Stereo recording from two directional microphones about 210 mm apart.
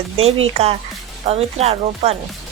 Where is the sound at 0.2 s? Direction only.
30° right (ahead or behind).